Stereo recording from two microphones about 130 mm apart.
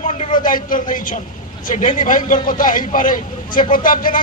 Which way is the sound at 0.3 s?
90° left.